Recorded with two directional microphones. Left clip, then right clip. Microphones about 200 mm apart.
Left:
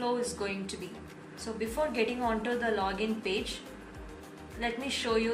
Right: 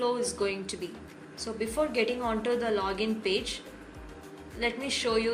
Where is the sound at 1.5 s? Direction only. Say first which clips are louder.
Right 2 dB; 55° right (ahead or behind).